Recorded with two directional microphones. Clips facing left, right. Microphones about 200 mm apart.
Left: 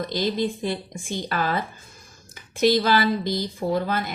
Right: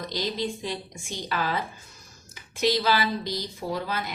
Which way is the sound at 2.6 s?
50° left (ahead or behind).